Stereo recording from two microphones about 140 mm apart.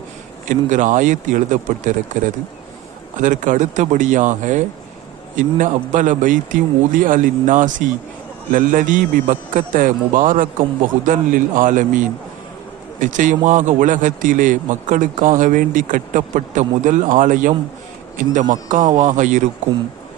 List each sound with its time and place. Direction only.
0.4 s a man's voice: 65° right (ahead or behind)